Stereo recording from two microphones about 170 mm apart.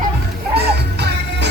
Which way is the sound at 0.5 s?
75° right (ahead or behind).